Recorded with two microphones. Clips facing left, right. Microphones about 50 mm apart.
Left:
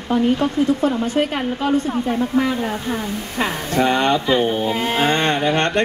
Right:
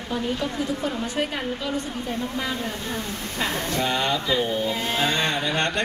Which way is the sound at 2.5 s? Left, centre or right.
Left.